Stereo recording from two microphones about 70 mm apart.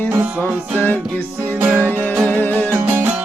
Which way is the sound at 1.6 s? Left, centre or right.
Right.